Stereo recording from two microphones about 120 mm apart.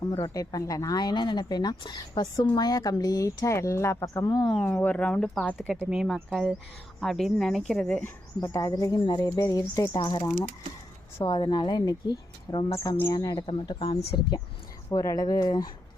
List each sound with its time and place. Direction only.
0.2 s speech: 30° left (ahead or behind)
4.5 s speech: 10° left (ahead or behind)
5.8 s speech: 5° right (ahead or behind)
8.4 s speech: 30° left (ahead or behind)
13.4 s speech: 50° left (ahead or behind)
14.8 s speech: 30° left (ahead or behind)